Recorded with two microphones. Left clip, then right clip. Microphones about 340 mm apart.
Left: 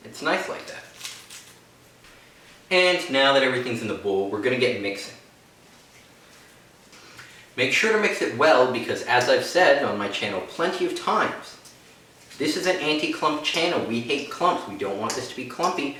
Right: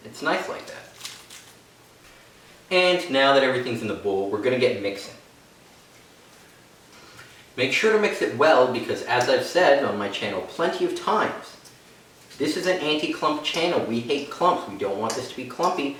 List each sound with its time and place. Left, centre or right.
0.1 s speech: left
2.6 s speech: left
7.5 s speech: left
12.4 s speech: left